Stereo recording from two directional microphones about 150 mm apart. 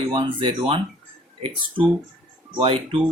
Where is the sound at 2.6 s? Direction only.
35° right (ahead or behind).